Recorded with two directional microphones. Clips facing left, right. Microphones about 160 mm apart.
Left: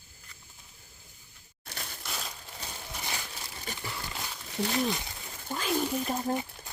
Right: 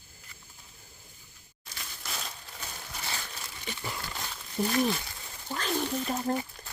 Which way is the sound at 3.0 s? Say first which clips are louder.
Even; 15° left (ahead or behind).